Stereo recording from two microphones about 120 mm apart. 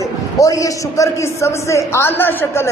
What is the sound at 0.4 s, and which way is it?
A man's voice, 30° left (ahead or behind).